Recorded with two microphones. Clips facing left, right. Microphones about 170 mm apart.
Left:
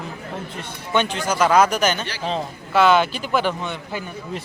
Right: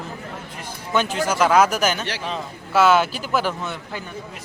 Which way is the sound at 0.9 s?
5° right (ahead or behind).